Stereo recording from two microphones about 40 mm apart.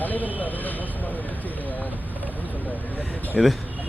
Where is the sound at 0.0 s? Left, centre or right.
Left.